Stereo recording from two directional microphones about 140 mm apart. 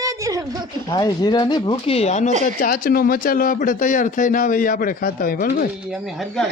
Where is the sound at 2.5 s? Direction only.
85° left.